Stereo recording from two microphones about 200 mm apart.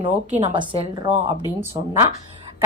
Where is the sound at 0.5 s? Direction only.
25° right (ahead or behind).